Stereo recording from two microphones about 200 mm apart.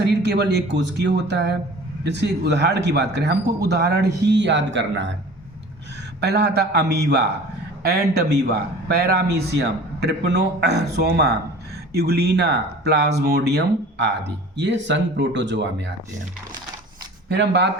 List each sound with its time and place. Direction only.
0.2 s speech: 60° right (ahead or behind)
6.1 s a man's voice: 55° right (ahead or behind)
17.3 s speech: 60° right (ahead or behind)